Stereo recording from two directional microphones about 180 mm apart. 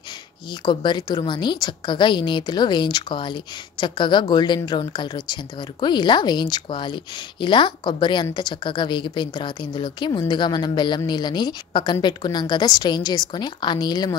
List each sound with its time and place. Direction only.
0.7 s a woman's voice: 25° left (ahead or behind)